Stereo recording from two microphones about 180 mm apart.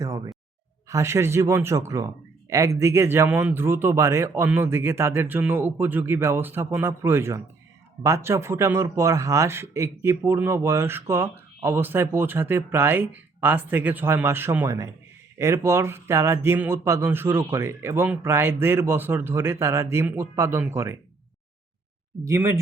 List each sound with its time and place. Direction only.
0.0 s speech: 20° right (ahead or behind)
22.2 s speech: 15° right (ahead or behind)